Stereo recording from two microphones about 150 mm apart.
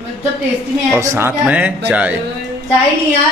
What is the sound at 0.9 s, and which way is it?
Speech, 15° right (ahead or behind).